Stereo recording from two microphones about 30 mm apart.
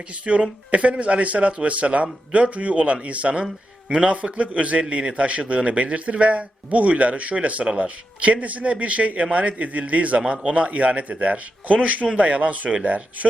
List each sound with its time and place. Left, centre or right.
0.3 s speech: right
0.7 s a man's voice: right
3.4 s speech: right
4.1 s a man's voice: right
10.2 s a man's voice: right
10.4 s a man's voice: right